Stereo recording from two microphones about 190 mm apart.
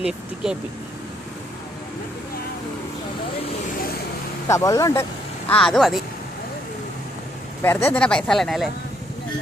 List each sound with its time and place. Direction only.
0.0 s speech: 5° right (ahead or behind)
4.4 s speech: 15° left (ahead or behind)
5.5 s speech: 5° left (ahead or behind)
7.6 s speech: 10° left (ahead or behind)